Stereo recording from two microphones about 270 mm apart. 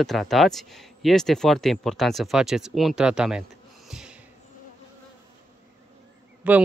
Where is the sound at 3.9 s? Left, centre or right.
Centre.